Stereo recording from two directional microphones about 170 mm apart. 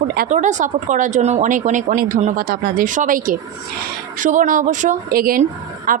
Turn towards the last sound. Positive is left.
turn(degrees=-55)  # may be behind; listen again after turning